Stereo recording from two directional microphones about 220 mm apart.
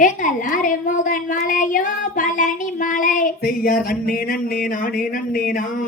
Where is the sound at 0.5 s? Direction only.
35° left (ahead or behind).